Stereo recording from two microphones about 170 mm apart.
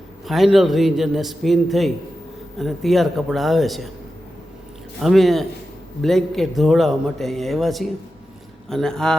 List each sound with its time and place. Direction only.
0.3 s speech: centre (ahead or behind)
4.9 s speech: centre (ahead or behind)